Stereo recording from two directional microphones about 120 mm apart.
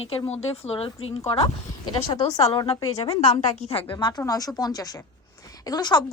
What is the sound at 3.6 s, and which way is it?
Speech, 55° left (ahead or behind).